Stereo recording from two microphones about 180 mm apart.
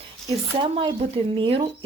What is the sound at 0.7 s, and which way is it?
Speech, 30° right (ahead or behind).